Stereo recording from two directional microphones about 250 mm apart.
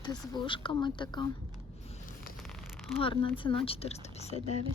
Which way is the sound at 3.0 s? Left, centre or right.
Left.